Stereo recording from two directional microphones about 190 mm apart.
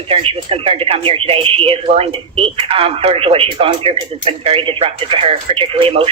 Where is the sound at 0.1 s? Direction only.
30° right (ahead or behind).